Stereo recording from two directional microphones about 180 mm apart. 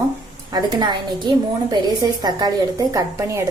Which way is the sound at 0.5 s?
25° right (ahead or behind).